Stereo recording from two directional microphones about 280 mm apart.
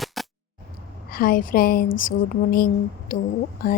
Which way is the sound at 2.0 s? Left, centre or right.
Left.